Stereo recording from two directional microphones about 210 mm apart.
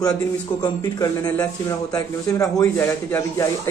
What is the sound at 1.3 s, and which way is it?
A man's voice, 10° left (ahead or behind).